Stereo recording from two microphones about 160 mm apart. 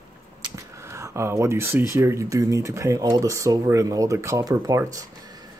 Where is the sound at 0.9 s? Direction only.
15° right (ahead or behind).